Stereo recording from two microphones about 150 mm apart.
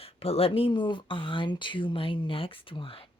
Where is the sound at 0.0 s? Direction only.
40° left (ahead or behind).